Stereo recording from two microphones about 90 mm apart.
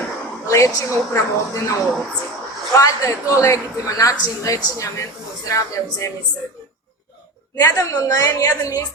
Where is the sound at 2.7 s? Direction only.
35° left (ahead or behind).